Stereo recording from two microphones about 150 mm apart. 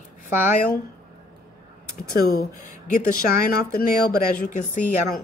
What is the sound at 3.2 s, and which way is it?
Speech, 80° left.